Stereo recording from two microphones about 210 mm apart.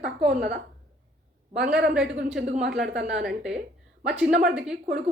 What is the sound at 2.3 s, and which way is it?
Speech, 35° right (ahead or behind).